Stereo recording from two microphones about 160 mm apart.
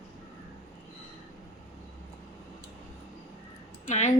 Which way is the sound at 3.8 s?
45° left (ahead or behind).